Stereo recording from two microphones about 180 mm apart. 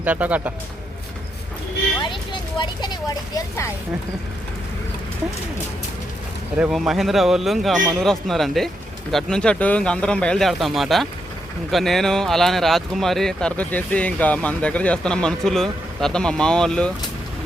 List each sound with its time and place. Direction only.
0.0 s speech: 10° right (ahead or behind)
2.0 s speech: 25° left (ahead or behind)
6.6 s speech: centre (ahead or behind)